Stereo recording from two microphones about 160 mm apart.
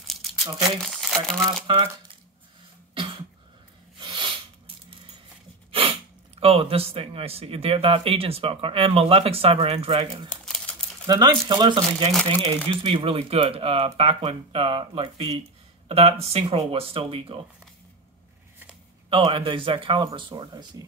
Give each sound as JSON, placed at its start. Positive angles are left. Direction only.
{"t": 0.0, "sound": "crumpling", "side_deg": 0}
{"t": 4.0, "sound": "sneeze", "side_deg": -30}
{"t": 5.7, "sound": "a sound", "side_deg": -35}
{"t": 6.4, "sound": "speech", "side_deg": -35}
{"t": 10.4, "sound": "a sound", "side_deg": 5}
{"t": 11.1, "sound": "speech", "side_deg": -25}
{"t": 12.1, "sound": "speech", "side_deg": 5}
{"t": 12.6, "sound": "speech", "side_deg": -35}
{"t": 19.0, "sound": "speech", "side_deg": -30}